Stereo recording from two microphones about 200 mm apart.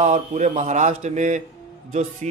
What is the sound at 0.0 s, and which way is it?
A man's voice, 35° right (ahead or behind).